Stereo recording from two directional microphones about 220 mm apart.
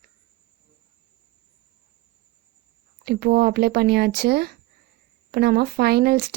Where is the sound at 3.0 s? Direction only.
45° right (ahead or behind).